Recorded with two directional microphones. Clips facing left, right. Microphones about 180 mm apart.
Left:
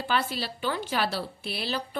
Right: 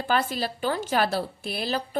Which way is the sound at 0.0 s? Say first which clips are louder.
Right 3 dB; 45° right (ahead or behind).